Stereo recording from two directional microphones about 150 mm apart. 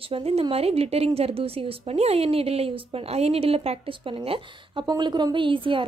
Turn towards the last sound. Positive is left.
turn(degrees=-35)  # may be behind; listen again after turning